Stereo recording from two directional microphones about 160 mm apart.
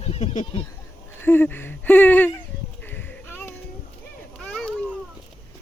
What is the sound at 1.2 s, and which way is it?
Speech, 15° left (ahead or behind).